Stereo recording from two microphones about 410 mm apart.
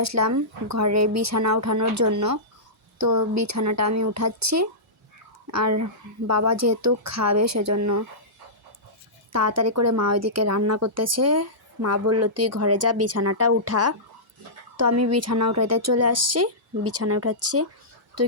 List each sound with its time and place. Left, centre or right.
0.0 s a woman's voice: right
9.3 s a woman's voice: right